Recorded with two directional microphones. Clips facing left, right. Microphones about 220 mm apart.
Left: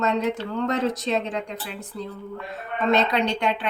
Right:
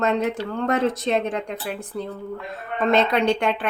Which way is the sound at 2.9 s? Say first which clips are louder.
Right 3 dB; 55° right (ahead or behind).